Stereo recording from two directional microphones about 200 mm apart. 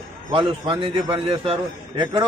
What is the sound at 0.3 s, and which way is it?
A man's voice, 25° right (ahead or behind).